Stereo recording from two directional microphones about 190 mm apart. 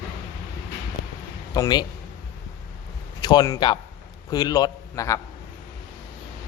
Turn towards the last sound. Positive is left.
turn(degrees=15)  # may be behind; listen again after turning